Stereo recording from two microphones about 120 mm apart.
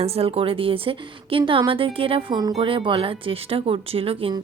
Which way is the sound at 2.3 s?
35° right (ahead or behind).